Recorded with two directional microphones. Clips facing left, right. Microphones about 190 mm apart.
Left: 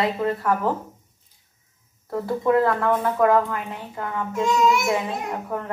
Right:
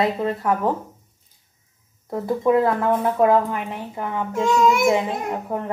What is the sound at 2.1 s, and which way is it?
A woman's voice, 15° right (ahead or behind).